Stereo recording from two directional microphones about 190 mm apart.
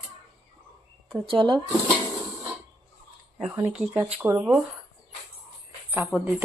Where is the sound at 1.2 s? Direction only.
25° right (ahead or behind).